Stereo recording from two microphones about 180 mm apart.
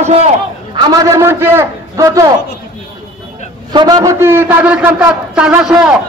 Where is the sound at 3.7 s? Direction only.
25° right (ahead or behind); by 5.7 s 5° right (ahead or behind).